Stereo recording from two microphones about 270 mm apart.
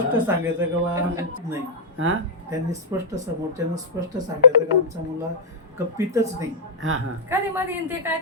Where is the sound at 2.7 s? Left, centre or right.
Centre.